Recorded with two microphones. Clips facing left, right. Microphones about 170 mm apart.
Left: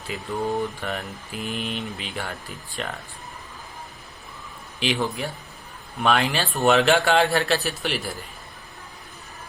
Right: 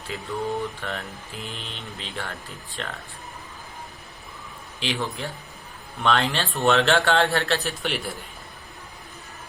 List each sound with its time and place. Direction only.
0.1 s speech: 15° left (ahead or behind)
4.8 s speech: 15° left (ahead or behind); by 8.2 s centre (ahead or behind)